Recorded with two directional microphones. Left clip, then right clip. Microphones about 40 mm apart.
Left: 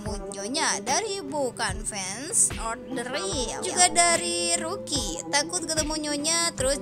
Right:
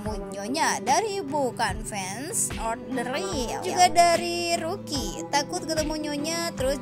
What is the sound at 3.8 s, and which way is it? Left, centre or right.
Music, right.